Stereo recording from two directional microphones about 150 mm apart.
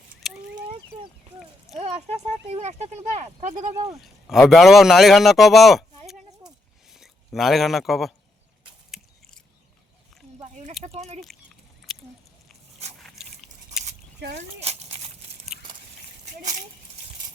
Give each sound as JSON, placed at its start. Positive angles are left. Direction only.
{"t": 0.2, "sound": "fowl", "side_deg": 0}
{"t": 2.5, "sound": "speech", "side_deg": -45}
{"t": 3.9, "sound": "a man's voice", "side_deg": 0}
{"t": 6.9, "sound": "speech", "side_deg": 0}
{"t": 8.9, "sound": "biting", "side_deg": 5}
{"t": 10.4, "sound": "a sound", "side_deg": -45}
{"t": 10.8, "sound": "speech", "side_deg": -45}
{"t": 13.0, "sound": "dog", "side_deg": 0}
{"t": 14.6, "sound": "a sound", "side_deg": -45}
{"t": 16.4, "sound": "a sound", "side_deg": -55}